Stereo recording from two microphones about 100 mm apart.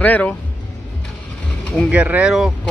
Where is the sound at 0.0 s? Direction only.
15° left (ahead or behind).